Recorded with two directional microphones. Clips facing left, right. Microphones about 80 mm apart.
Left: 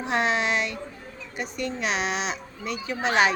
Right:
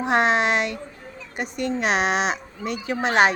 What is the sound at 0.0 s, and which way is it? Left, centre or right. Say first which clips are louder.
Speech: right 5 dB; right.